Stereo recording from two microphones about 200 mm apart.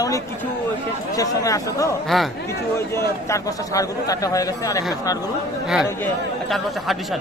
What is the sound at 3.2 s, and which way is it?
A man's voice, 15° left (ahead or behind).